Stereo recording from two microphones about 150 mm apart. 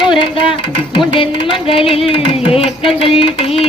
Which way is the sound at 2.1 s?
40° left (ahead or behind).